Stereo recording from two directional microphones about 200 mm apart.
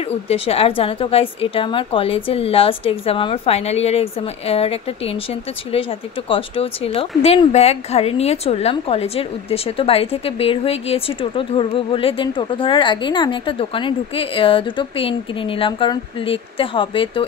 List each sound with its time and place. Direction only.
0.1 s a woman's voice: 30° left (ahead or behind)